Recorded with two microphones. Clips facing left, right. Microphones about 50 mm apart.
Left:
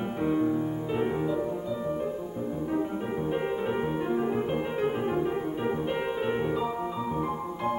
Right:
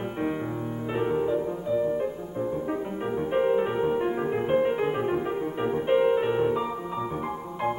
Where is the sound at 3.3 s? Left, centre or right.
Right.